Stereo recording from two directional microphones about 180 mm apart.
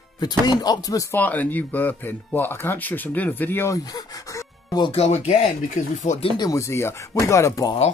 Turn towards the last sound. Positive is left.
turn(degrees=20)  # may be behind; listen again after turning